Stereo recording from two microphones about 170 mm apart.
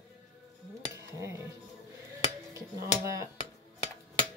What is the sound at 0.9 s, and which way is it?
Dishes, 20° right (ahead or behind).